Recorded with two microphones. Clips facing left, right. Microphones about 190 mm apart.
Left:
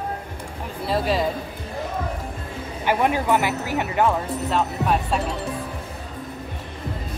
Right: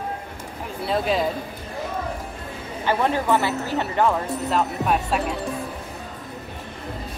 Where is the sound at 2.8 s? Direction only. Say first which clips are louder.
Left 1 dB; 15° left (ahead or behind).